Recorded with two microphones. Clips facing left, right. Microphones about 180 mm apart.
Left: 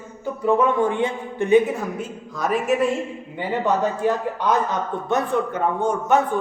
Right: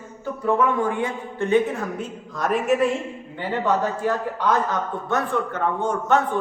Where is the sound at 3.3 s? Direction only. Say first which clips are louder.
Left 1 dB; 15° left (ahead or behind).